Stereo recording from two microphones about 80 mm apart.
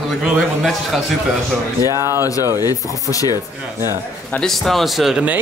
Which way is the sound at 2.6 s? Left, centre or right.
Left.